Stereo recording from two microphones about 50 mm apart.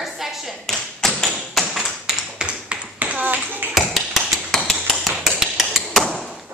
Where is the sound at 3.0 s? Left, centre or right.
Right.